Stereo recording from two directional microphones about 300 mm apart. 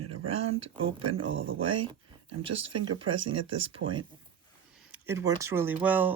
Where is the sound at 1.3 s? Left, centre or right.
Right.